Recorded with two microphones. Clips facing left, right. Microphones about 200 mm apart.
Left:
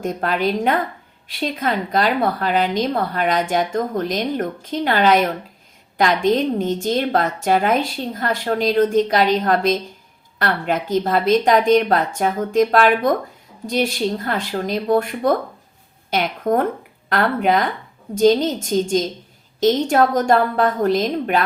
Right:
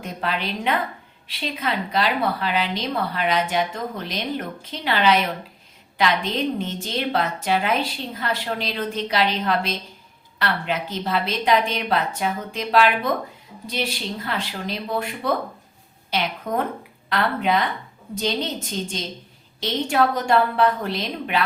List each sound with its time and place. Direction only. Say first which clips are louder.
0.0 s a woman's voice: left 7 dB; 45° left (ahead or behind)